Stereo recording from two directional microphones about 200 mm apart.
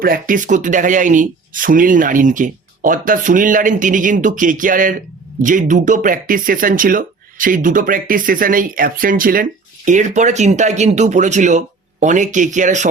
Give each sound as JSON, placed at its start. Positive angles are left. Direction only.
{"t": 0.0, "sound": "speech", "side_deg": -45}